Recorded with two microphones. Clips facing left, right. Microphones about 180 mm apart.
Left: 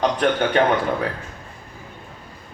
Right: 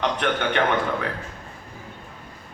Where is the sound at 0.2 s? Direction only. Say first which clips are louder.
Left 5 dB; 35° left (ahead or behind).